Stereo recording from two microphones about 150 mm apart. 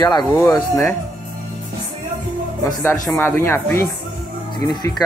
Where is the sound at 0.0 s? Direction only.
30° left (ahead or behind).